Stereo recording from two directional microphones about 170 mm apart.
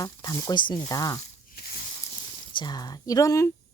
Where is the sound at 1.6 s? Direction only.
70° left (ahead or behind).